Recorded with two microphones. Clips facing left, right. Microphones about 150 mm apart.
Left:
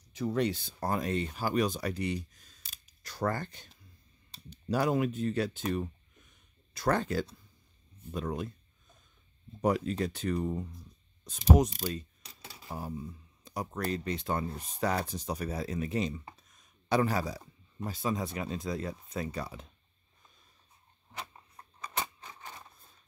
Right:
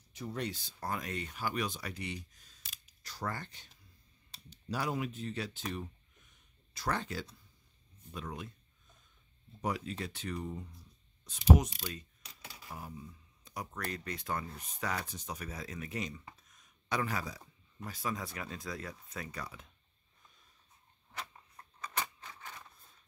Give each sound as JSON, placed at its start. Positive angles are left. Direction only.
{"t": 0.1, "sound": "speech", "side_deg": 90}
{"t": 0.7, "sound": "speech", "side_deg": 35}
{"t": 3.0, "sound": "speech", "side_deg": 55}
{"t": 9.6, "sound": "speech", "side_deg": 45}
{"t": 21.2, "sound": "a sound", "side_deg": 20}